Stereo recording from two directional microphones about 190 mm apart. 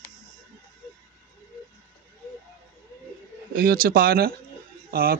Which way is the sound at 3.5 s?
50° right (ahead or behind).